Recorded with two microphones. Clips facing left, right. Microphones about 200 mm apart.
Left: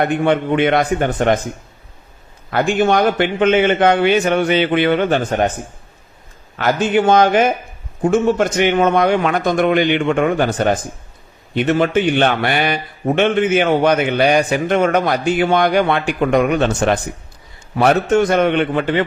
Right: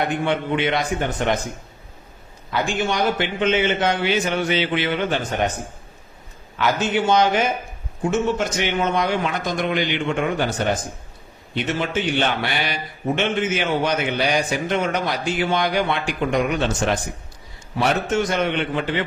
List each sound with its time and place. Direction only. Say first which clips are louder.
0.0 s a man's voice: left 6 dB; 55° left (ahead or behind)
2.5 s a man's voice: left 8 dB; 55° left (ahead or behind)
6.6 s a man's voice: left 5 dB; 50° left (ahead or behind)